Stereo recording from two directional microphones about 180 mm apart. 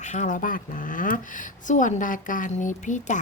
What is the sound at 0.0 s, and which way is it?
A woman's voice, 45° left (ahead or behind).